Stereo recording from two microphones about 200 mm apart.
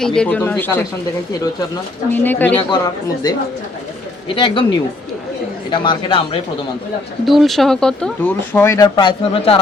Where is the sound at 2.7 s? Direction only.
20° left (ahead or behind).